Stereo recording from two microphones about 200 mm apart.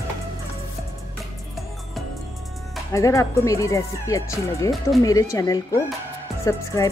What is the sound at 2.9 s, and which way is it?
Speech, 15° left (ahead or behind).